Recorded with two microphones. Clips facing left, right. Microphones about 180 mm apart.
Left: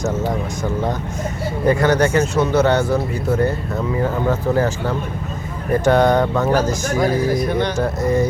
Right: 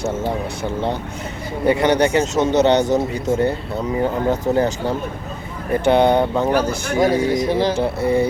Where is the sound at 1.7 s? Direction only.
20° right (ahead or behind).